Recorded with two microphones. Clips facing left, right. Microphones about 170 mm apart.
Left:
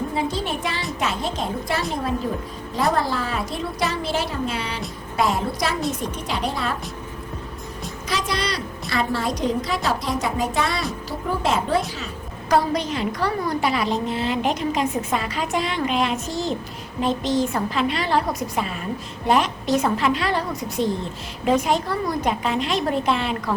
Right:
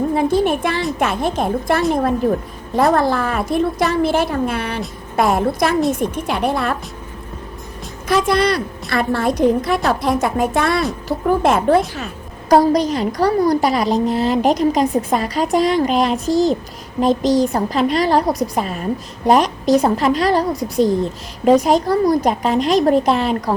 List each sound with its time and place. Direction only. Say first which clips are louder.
0.1 s a woman's voice: right 9 dB; 55° right (ahead or behind)
8.0 s a woman's voice: right 10 dB; 55° right (ahead or behind)
12.5 s a woman's voice: right 8 dB; 40° right (ahead or behind)